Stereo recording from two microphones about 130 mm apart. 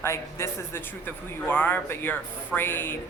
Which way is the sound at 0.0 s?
20° left (ahead or behind).